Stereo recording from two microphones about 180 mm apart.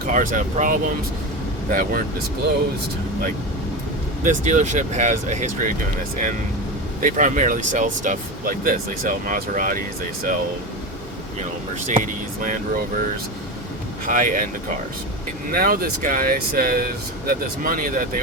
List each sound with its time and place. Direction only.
0.0 s speech: 50° right (ahead or behind)
4.2 s speech: 45° right (ahead or behind)
7.0 s speech: 45° right (ahead or behind)
11.9 s speech: 45° right (ahead or behind)
14.1 s speech: 45° right (ahead or behind)
15.4 s speech: 55° right (ahead or behind)